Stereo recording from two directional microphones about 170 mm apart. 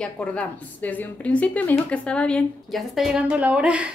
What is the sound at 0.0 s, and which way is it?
A woman's voice, 5° left (ahead or behind).